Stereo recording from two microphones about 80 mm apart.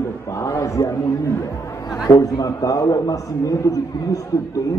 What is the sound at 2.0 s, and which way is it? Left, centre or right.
A man's voice, left.